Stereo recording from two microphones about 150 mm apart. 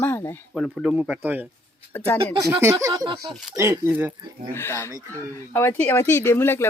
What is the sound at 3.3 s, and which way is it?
Speech, centre (ahead or behind).